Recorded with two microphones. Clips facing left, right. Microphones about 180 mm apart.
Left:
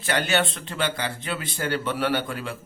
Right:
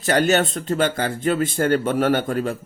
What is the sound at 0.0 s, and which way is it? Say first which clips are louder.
Speech: right 6 dB; 45° right (ahead or behind).